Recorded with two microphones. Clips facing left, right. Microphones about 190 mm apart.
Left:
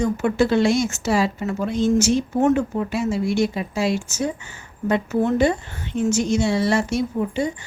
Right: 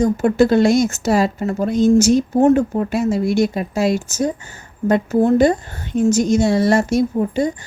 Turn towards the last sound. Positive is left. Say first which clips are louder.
# right 4 dB
turn(degrees=-40)  # may be behind; listen again after turning